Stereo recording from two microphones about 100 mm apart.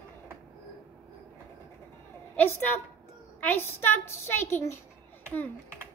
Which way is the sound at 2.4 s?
20° left (ahead or behind).